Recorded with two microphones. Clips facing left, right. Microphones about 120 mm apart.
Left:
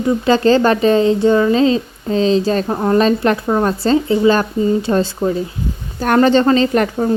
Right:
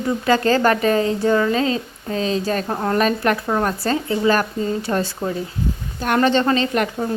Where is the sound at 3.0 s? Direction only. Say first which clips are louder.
Left 3 dB; 25° left (ahead or behind).